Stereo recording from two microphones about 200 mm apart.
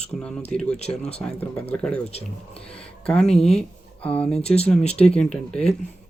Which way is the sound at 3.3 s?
30° left (ahead or behind).